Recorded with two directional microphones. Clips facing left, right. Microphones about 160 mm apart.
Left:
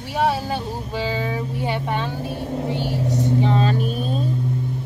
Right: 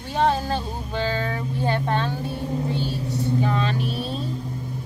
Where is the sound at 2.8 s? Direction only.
75° left (ahead or behind).